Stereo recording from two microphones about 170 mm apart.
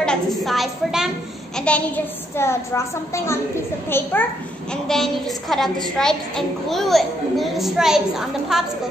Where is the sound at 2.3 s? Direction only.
15° left (ahead or behind).